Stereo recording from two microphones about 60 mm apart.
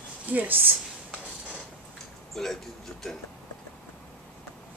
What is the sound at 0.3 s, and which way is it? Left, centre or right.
Speech, right.